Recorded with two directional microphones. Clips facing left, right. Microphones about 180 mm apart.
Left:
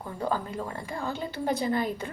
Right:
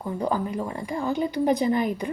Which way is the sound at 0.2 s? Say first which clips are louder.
Right 3 dB; 15° right (ahead or behind).